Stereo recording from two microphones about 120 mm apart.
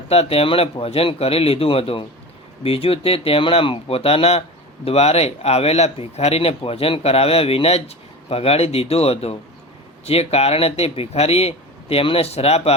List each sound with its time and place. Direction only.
0.1 s speech: 55° left (ahead or behind)